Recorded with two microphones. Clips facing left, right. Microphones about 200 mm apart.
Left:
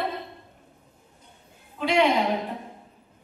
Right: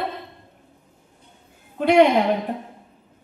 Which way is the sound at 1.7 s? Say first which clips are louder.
Right 7 dB; 60° right (ahead or behind).